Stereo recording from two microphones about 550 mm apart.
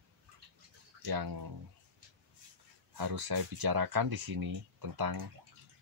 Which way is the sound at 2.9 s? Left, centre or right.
Right.